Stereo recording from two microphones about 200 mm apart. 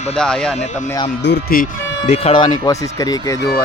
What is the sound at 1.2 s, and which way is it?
Speech, 55° left (ahead or behind).